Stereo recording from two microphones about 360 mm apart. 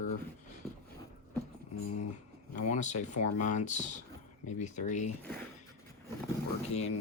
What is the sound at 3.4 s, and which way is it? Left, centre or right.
Speech, centre.